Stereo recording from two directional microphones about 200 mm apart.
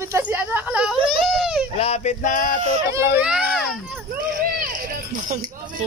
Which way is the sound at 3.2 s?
5° right (ahead or behind).